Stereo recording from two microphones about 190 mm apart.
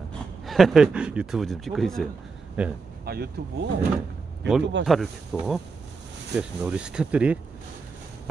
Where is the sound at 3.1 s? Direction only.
55° right (ahead or behind).